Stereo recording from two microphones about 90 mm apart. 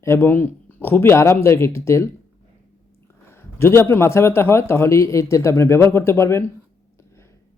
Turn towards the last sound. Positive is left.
turn(degrees=30)  # may be behind; listen again after turning